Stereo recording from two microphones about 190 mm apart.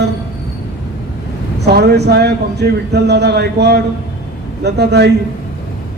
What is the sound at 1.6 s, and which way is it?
A man's voice, 60° right (ahead or behind).